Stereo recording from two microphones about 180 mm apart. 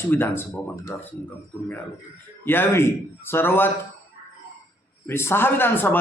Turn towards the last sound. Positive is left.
turn(degrees=10)  # may be behind; listen again after turning